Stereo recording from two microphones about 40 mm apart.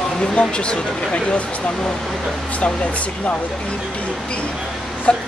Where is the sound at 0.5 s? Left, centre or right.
Left.